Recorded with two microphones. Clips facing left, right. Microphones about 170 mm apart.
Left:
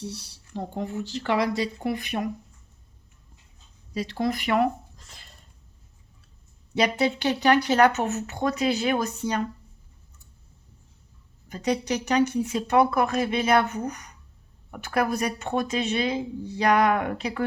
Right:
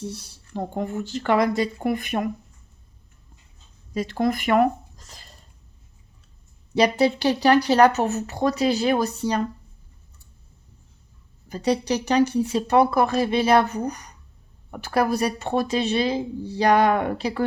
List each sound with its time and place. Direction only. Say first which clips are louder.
0.0 s speech: right 3 dB; 50° right (ahead or behind)
3.9 s speech: right 4 dB; 50° right (ahead or behind)
6.7 s speech: right 4 dB; 35° right (ahead or behind)
11.4 s speech: right 3 dB; 35° right (ahead or behind)